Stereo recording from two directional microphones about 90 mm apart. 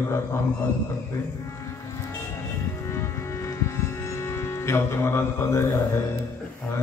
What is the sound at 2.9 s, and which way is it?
Music, 30° left (ahead or behind).